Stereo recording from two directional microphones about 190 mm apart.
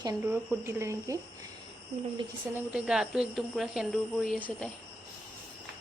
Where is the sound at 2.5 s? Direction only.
5° right (ahead or behind).